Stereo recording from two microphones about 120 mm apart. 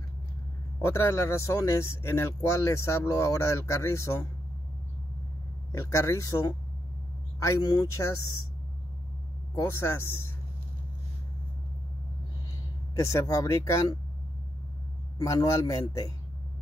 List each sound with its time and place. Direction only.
0.8 s speech: 20° left (ahead or behind)
5.7 s speech: 25° left (ahead or behind)
9.6 s speech: 20° left (ahead or behind)
12.9 s speech: 25° left (ahead or behind)
15.1 s speech: 30° left (ahead or behind)